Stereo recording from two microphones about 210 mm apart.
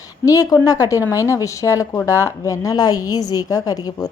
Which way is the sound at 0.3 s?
15° left (ahead or behind).